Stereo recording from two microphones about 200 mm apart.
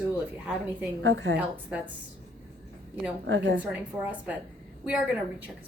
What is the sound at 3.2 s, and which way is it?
Speech, 65° right (ahead or behind).